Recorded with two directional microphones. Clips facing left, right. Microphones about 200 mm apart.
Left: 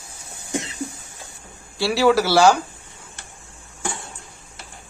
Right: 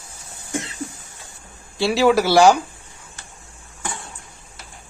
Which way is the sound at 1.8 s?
15° right (ahead or behind).